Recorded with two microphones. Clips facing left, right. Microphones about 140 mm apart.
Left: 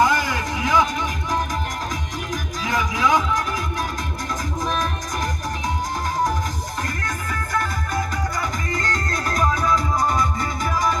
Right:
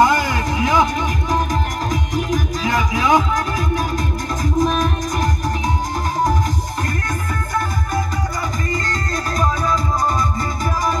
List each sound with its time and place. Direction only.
0.0 s a sound: 60° right (ahead or behind)
2.3 s music: 65° right (ahead or behind)
4.6 s music: 20° right (ahead or behind)